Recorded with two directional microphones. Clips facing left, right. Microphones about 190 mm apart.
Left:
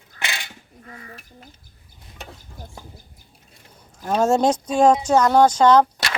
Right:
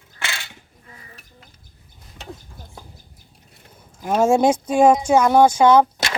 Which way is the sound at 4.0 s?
10° right (ahead or behind).